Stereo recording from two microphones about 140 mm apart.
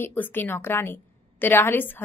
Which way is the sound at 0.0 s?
15° left (ahead or behind).